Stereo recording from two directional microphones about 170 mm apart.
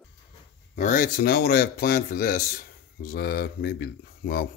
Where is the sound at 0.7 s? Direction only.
50° left (ahead or behind).